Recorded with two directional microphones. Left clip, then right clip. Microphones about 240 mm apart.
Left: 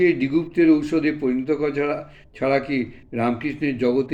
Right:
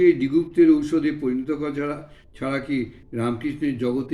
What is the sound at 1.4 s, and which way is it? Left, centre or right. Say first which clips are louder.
Speech: left 4 dB; centre.